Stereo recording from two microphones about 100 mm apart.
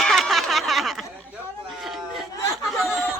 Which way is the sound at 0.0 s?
Centre (ahead or behind).